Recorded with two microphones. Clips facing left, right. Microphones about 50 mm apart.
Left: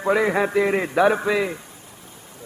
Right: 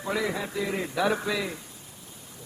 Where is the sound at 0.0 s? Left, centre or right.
Left.